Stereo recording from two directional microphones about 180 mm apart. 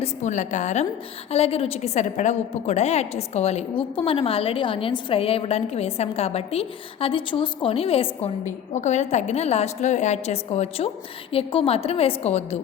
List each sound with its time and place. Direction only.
0.0 s a woman's voice: 40° left (ahead or behind)